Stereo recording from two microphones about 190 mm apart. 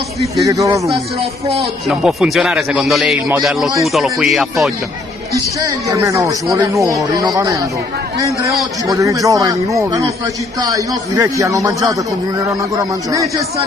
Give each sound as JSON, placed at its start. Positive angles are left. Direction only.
{"t": 0.5, "sound": "a man's voice", "side_deg": -15}
{"t": 1.9, "sound": "speech", "side_deg": 0}
{"t": 5.3, "sound": "a man's voice", "side_deg": -15}